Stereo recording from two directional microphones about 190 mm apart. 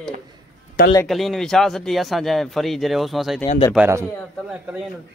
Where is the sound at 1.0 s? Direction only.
Centre (ahead or behind).